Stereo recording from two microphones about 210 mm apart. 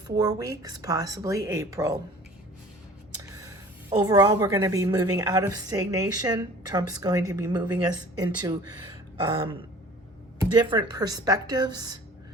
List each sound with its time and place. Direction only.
0.2 s a woman's voice: 15° right (ahead or behind)
4.0 s a woman's voice: 20° right (ahead or behind)